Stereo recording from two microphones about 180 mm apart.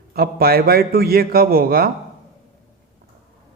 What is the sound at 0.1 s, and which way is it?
A man's voice, 55° right (ahead or behind).